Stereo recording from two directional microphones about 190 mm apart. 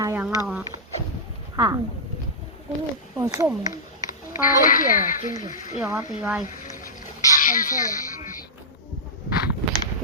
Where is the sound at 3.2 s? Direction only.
15° right (ahead or behind).